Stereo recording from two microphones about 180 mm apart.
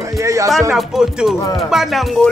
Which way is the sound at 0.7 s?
5° right (ahead or behind).